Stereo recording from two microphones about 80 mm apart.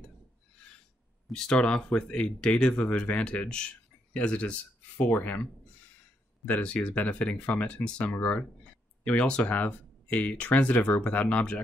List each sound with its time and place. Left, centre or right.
1.2 s speech: centre